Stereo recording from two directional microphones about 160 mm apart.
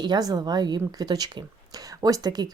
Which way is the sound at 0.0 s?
25° right (ahead or behind).